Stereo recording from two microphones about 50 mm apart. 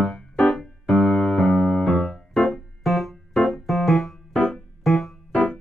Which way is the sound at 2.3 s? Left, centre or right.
Centre.